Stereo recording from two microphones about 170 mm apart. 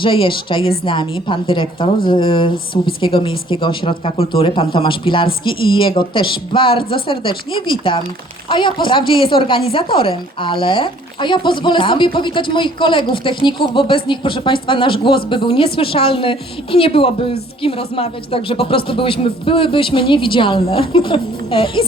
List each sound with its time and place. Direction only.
0.0 s speech: 30° left (ahead or behind)